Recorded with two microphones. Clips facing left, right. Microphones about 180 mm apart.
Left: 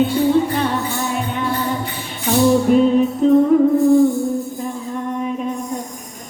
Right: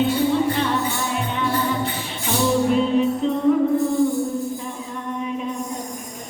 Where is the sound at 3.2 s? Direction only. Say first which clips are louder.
Left 9 dB; 45° left (ahead or behind).